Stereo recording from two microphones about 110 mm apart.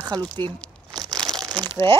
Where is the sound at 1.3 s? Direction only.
40° right (ahead or behind).